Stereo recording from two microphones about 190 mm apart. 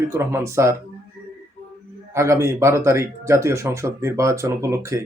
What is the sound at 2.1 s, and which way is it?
Speech, 15° right (ahead or behind).